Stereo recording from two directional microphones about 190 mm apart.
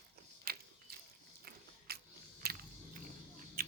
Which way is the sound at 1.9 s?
55° right (ahead or behind).